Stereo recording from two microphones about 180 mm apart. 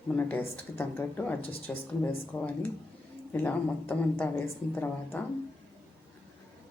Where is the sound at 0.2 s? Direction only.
10° left (ahead or behind).